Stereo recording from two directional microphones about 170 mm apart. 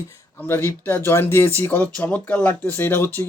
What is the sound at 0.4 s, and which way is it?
Speech, 15° left (ahead or behind).